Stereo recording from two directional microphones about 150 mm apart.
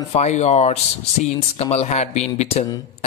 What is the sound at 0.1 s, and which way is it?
Speech, 50° left (ahead or behind).